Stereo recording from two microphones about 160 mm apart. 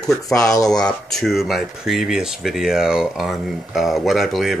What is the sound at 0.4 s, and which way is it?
Speech, 20° left (ahead or behind).